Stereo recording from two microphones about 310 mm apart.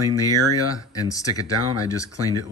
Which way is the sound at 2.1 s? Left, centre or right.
Left.